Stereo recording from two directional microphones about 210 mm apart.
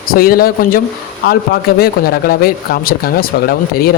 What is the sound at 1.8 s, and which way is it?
Speech, 45° left (ahead or behind).